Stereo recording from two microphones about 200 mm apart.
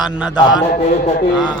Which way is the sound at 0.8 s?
35° left (ahead or behind).